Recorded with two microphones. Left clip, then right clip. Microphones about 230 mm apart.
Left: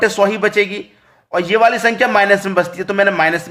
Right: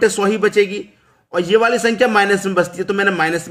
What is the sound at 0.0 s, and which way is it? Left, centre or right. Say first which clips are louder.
Speech: left 1 dB; centre.